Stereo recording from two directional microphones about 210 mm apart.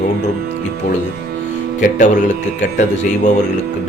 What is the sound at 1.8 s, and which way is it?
Speech, 35° left (ahead or behind).